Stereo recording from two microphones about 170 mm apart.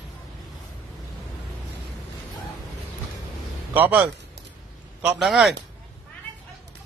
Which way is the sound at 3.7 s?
10° right (ahead or behind).